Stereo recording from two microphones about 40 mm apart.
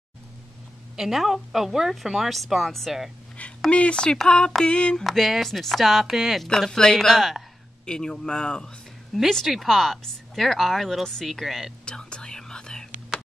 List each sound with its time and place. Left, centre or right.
0.9 s speech: centre
3.7 s speech: left
5.0 s speech: centre
6.4 s speech: centre
7.2 s speech: centre
7.8 s speech: left
9.1 s speech: centre
11.8 s whispering: left